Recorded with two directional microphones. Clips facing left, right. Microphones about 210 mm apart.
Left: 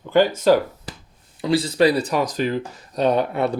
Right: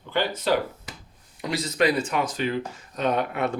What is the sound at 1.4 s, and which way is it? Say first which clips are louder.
Speech: left 6 dB; 30° left (ahead or behind).